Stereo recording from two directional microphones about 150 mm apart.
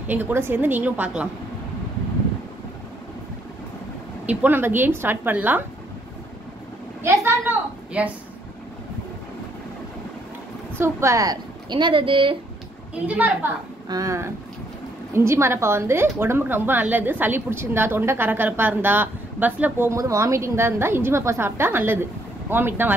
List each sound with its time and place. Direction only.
0.0 s a woman's voice: 10° right (ahead or behind)
4.3 s a woman's voice: 10° right (ahead or behind)
7.0 s a woman's voice: 15° right (ahead or behind)
10.8 s a woman's voice: 20° right (ahead or behind); by 12.4 s 35° right (ahead or behind)
13.0 s a woman's voice: 10° right (ahead or behind)
13.8 s a woman's voice: 25° right (ahead or behind)